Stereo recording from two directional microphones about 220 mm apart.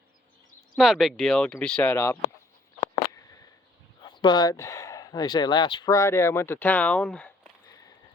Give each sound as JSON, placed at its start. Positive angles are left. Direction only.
{"t": 0.8, "sound": "speech", "side_deg": 0}
{"t": 4.0, "sound": "speech", "side_deg": 20}